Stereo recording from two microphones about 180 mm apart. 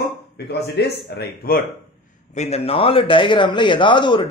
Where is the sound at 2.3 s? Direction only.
35° left (ahead or behind).